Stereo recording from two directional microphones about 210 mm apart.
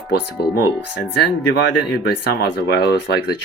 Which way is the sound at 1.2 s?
55° left (ahead or behind).